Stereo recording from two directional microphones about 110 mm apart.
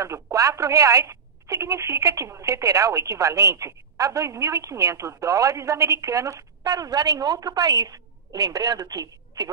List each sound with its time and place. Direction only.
0.0 s speech: 30° right (ahead or behind)